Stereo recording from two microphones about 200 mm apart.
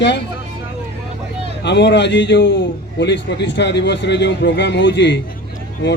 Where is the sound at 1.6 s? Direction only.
60° left (ahead or behind).